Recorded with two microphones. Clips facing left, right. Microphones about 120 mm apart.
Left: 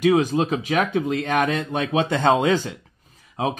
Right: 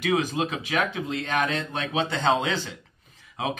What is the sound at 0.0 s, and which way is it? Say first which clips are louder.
Speech: left 6 dB; 40° left (ahead or behind).